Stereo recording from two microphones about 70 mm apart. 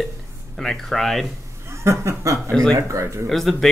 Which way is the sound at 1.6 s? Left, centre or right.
Right.